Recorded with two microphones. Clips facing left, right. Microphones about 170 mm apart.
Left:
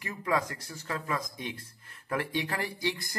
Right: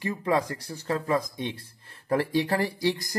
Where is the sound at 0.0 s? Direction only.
30° right (ahead or behind).